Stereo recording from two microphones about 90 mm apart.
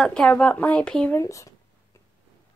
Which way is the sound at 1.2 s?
35° left (ahead or behind).